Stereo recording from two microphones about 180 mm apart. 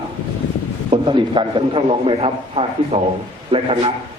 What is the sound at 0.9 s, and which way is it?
A man's voice, 25° right (ahead or behind).